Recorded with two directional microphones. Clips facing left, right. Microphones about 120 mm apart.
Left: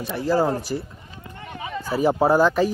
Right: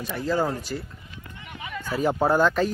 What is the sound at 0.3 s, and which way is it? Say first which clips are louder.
Speech: left 4 dB; 35° left (ahead or behind).